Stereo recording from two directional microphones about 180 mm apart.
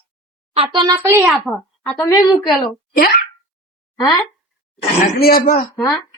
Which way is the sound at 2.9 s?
55° left (ahead or behind).